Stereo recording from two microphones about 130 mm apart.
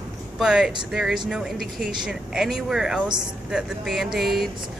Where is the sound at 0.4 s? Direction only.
5° right (ahead or behind).